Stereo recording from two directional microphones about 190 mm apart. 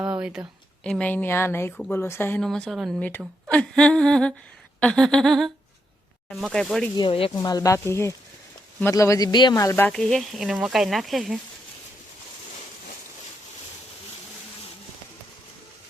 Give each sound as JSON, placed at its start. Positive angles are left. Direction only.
{"t": 0.0, "sound": "a sound", "side_deg": -5}
{"t": 0.9, "sound": "speech", "side_deg": 5}
{"t": 6.9, "sound": "speech", "side_deg": 25}